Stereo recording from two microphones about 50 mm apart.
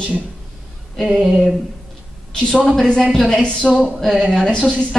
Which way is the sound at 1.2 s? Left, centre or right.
Centre.